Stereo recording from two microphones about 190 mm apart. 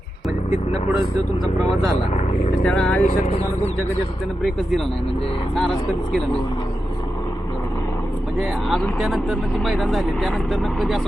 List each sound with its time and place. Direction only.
2.6 s speech: 5° left (ahead or behind)
3.0 s speech: 35° left (ahead or behind)
8.4 s speech: centre (ahead or behind)